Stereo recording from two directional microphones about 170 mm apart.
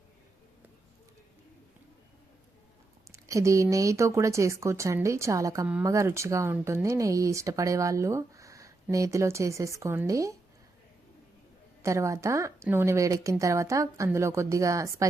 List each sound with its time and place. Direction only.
3.1 s speech: 20° right (ahead or behind)
11.8 s speech: 15° right (ahead or behind)